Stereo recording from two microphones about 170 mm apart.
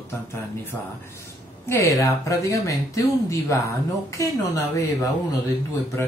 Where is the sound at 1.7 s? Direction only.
15° left (ahead or behind).